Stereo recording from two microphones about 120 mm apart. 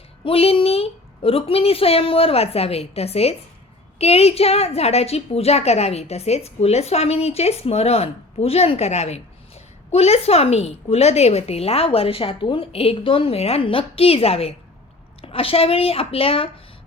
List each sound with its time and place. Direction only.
0.3 s a woman's voice: 55° left (ahead or behind)